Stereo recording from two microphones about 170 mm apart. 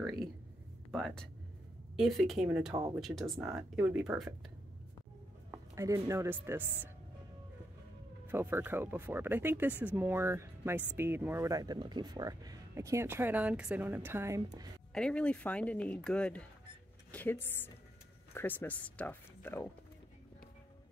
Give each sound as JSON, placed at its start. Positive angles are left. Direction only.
{"t": 0.9, "sound": "a woman's voice", "side_deg": 5}
{"t": 3.3, "sound": "speech", "side_deg": -15}
{"t": 5.5, "sound": "speech", "side_deg": -20}
{"t": 8.3, "sound": "speech", "side_deg": -15}
{"t": 14.9, "sound": "speech", "side_deg": 5}